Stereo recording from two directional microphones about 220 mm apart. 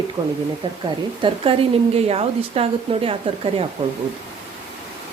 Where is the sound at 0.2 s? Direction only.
20° right (ahead or behind).